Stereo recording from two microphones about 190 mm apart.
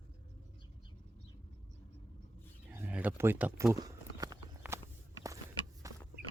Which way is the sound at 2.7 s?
10° right (ahead or behind).